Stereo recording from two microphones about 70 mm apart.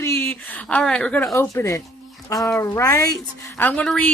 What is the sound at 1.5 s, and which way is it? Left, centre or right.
Speech, left.